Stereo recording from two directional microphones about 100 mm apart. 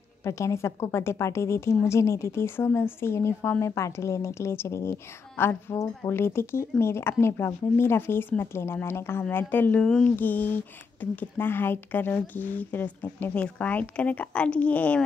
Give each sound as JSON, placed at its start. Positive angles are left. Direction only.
{"t": 0.2, "sound": "a woman's voice", "side_deg": 30}